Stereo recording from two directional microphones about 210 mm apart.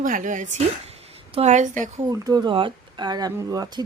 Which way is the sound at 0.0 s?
40° right (ahead or behind).